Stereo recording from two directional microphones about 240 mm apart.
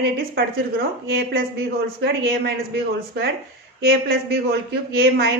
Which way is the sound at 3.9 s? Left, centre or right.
Right.